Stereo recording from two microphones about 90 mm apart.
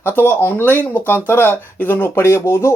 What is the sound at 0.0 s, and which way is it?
Speech, 25° left (ahead or behind).